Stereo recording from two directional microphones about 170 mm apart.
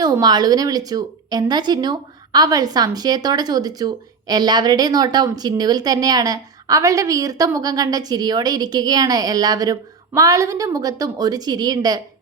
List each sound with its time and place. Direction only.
0.0 s a woman's voice: 25° right (ahead or behind)